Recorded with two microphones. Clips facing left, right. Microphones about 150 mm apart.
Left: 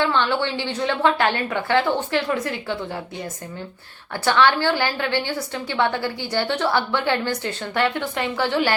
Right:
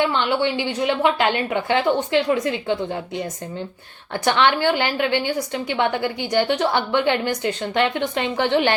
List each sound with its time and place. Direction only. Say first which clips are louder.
0.0 s a woman's voice: right 1 dB; 15° right (ahead or behind)
4.3 s a woman's voice: even; 20° right (ahead or behind)